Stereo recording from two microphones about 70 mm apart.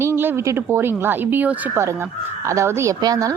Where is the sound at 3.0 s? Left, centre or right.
Right.